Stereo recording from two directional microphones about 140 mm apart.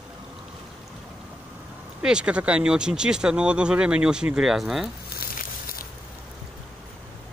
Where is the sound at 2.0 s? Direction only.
5° right (ahead or behind).